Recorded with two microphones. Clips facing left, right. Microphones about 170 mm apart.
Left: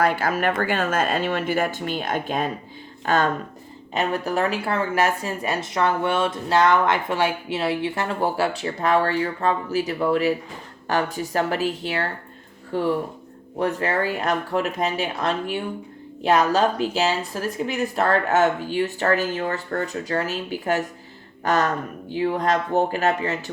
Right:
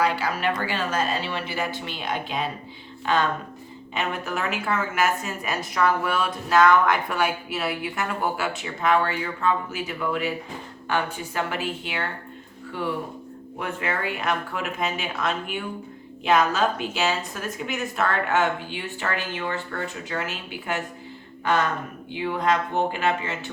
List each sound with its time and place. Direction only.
0.0 s speech: 50° left (ahead or behind)